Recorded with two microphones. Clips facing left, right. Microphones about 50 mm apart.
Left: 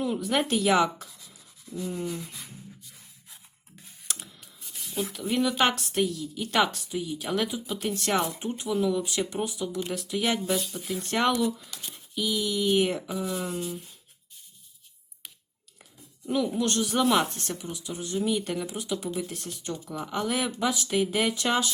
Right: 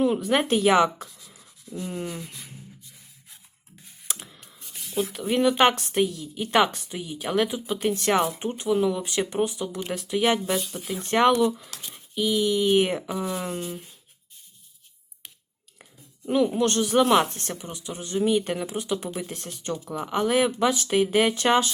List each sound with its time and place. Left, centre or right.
0.0 s speech: right
1.7 s sanding: centre
2.0 s speech: centre
4.4 s a sound: centre
5.1 s speech: right
8.4 s speech: right
10.5 s speech: right
11.3 s speech: right
12.1 s speech: right
13.0 s speech: right
15.8 s speech: right
20.9 s speech: right